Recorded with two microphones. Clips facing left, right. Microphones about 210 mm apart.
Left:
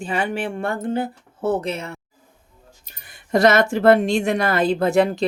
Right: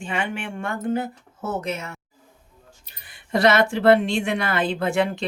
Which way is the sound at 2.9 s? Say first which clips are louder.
Left 4 dB; 45° left (ahead or behind).